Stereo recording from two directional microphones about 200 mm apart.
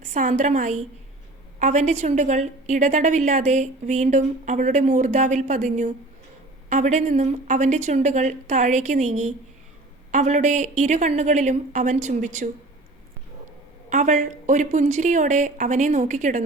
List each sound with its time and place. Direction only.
0.0 s a woman's voice: 35° right (ahead or behind)
13.9 s a woman's voice: 40° right (ahead or behind)